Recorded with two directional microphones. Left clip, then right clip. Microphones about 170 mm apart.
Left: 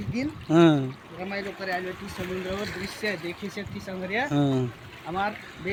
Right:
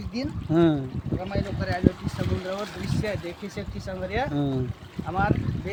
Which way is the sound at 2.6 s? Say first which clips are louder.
Even; 15° right (ahead or behind).